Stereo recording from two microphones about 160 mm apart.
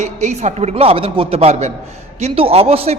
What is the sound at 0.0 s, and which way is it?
A man's voice, 45° right (ahead or behind).